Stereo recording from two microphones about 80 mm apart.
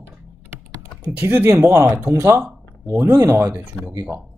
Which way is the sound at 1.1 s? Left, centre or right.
Right.